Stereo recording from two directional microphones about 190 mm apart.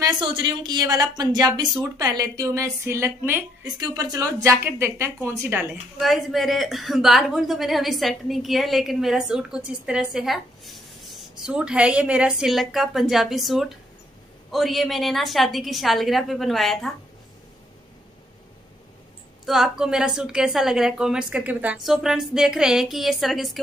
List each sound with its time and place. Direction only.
0.0 s a woman's voice: 25° right (ahead or behind)
5.9 s a woman's voice: centre (ahead or behind)
19.4 s a woman's voice: centre (ahead or behind)